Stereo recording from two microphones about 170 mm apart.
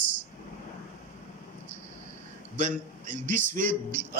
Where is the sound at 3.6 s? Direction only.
50° right (ahead or behind).